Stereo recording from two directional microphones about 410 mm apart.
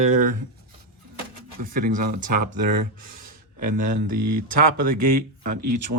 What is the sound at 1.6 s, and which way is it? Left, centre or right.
Speech, right.